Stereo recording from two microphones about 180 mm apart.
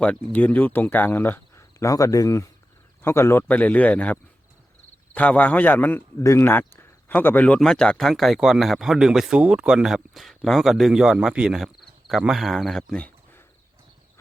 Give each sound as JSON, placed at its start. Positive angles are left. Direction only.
{"t": 0.0, "sound": "speech", "side_deg": 10}